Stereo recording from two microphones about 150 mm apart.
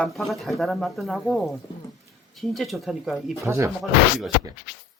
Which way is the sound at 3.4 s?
20° right (ahead or behind).